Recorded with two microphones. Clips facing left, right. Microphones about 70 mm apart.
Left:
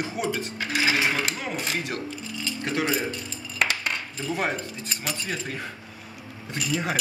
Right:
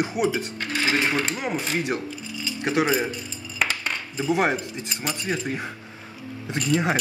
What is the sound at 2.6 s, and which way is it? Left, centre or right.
Speech, centre.